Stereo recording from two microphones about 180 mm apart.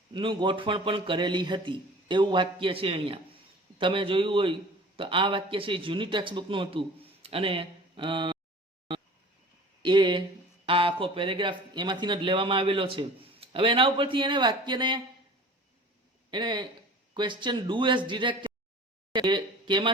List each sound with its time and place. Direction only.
0.1 s speech: 25° right (ahead or behind)
9.8 s a sound: 25° right (ahead or behind)
10.7 s speech: 30° right (ahead or behind)
16.3 s speech: 25° right (ahead or behind)